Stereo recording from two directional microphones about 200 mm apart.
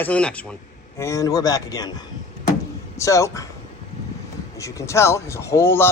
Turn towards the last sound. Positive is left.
turn(degrees=10)  # may be behind; listen again after turning